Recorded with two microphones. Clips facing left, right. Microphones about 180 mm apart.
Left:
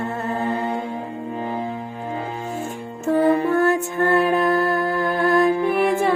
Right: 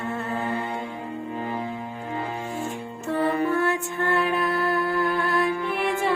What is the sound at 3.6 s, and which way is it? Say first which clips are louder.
Music: left 6 dB; 40° left (ahead or behind).